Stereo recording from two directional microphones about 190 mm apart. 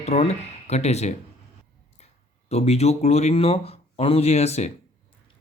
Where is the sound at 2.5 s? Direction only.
35° left (ahead or behind).